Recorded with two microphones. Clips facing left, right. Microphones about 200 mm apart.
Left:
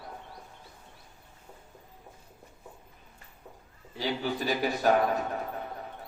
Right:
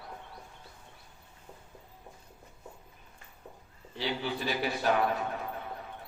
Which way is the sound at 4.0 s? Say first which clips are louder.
Left 2 dB; 45° left (ahead or behind).